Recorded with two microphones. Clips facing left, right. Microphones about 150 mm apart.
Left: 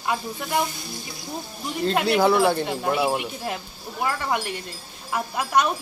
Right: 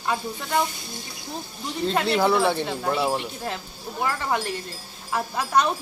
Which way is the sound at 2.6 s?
15° left (ahead or behind).